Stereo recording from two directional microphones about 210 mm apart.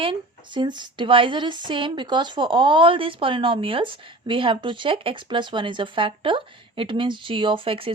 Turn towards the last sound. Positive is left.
turn(degrees=-25)  # may be behind; listen again after turning